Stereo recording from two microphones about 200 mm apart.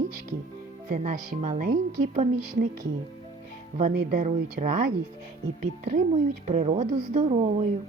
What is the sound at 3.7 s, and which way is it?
A woman's voice, 40° right (ahead or behind).